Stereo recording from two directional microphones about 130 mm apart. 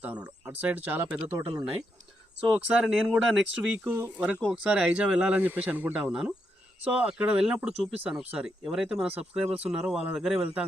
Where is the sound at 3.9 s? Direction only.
15° right (ahead or behind).